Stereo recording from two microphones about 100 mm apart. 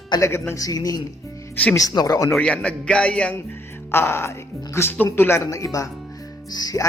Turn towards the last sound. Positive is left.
turn(degrees=40)  # may be behind; listen again after turning